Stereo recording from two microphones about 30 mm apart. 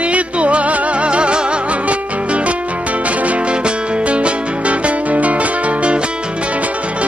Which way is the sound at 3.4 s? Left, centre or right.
Right.